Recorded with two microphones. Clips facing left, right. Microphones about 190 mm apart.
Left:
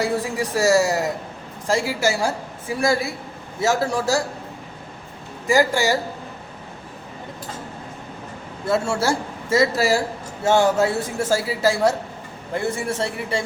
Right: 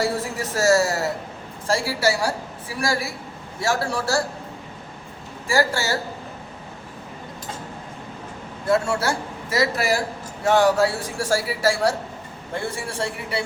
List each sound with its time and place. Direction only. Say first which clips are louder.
0.0 s a man's voice: left 2 dB; 15° left (ahead or behind)
5.5 s a woman's voice: left 4 dB; 15° left (ahead or behind)
8.7 s speech: even; 25° left (ahead or behind)